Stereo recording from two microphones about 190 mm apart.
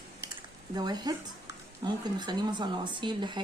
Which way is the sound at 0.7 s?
20° right (ahead or behind).